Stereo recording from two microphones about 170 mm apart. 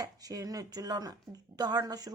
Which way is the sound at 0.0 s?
20° right (ahead or behind).